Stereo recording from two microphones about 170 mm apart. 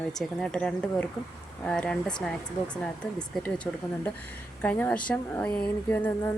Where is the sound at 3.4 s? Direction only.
5° left (ahead or behind).